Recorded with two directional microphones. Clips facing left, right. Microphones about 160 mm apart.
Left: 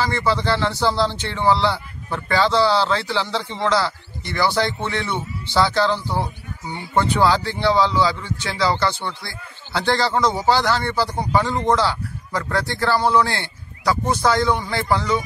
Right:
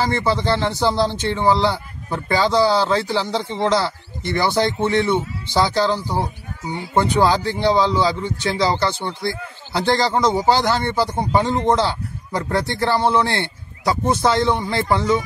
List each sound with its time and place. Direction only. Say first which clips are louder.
0.0 s a man's voice: right 1 dB; 20° right (ahead or behind)